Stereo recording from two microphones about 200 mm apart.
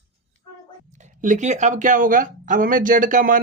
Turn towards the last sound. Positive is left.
turn(degrees=-40)  # may be behind; listen again after turning